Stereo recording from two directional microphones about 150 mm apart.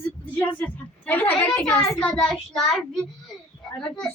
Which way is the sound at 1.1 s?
10° left (ahead or behind).